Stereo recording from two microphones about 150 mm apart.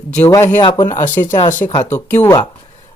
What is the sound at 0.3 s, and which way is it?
Speech, 20° left (ahead or behind).